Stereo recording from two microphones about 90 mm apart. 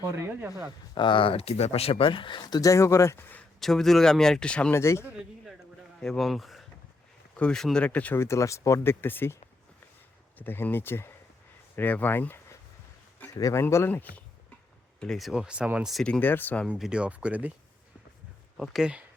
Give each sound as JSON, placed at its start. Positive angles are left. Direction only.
{"t": 0.1, "sound": "speech", "side_deg": -25}
{"t": 0.9, "sound": "speech", "side_deg": 65}
{"t": 3.6, "sound": "speech", "side_deg": 5}
{"t": 4.7, "sound": "speech", "side_deg": 30}
{"t": 6.0, "sound": "speech", "side_deg": 5}
{"t": 7.9, "sound": "speech", "side_deg": 15}
{"t": 8.2, "sound": "speech", "side_deg": 35}
{"t": 13.2, "sound": "speech", "side_deg": 35}
{"t": 15.0, "sound": "speech", "side_deg": 5}
{"t": 15.3, "sound": "speech", "side_deg": -10}
{"t": 16.2, "sound": "speech", "side_deg": 20}
{"t": 16.6, "sound": "speech", "side_deg": -5}
{"t": 18.5, "sound": "speech", "side_deg": 0}